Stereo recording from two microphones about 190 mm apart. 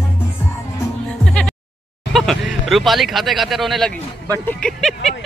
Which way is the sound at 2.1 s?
Centre (ahead or behind).